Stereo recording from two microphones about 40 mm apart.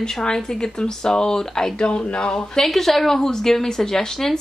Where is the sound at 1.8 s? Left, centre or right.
Left.